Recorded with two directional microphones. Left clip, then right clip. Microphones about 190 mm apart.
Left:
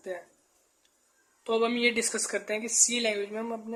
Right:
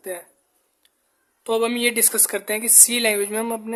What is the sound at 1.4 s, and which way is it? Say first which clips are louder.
A man's voice: right 5 dB; 30° right (ahead or behind).